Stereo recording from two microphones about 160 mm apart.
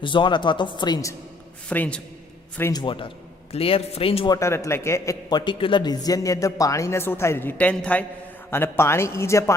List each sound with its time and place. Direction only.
0.0 s speech: 30° left (ahead or behind)
1.7 s a man's voice: 10° left (ahead or behind)
2.8 s speech: 30° left (ahead or behind)
4.4 s a man's voice: 15° left (ahead or behind)
5.5 s a man's voice: 30° left (ahead or behind)